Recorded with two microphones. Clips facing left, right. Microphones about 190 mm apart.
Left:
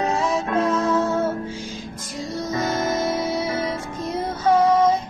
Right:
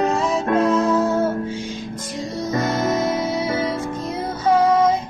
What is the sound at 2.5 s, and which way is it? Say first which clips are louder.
Music: right 3 dB; centre (ahead or behind).